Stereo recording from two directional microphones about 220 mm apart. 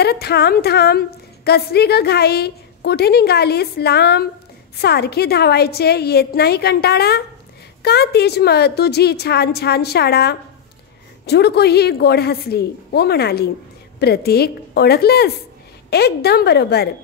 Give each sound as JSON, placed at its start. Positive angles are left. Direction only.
{"t": 0.0, "sound": "a woman's voice", "side_deg": 45}